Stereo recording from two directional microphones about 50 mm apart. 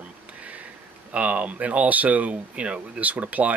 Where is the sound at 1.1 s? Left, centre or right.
Right.